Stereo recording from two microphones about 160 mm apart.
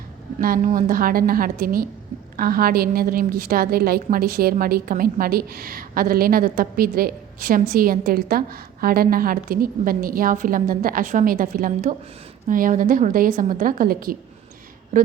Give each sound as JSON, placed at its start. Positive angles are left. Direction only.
{"t": 0.3, "sound": "a woman's voice", "side_deg": -55}